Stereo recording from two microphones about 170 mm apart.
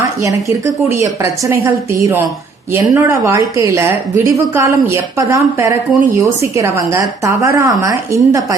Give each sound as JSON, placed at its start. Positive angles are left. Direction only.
{"t": 0.2, "sound": "a woman's voice", "side_deg": -20}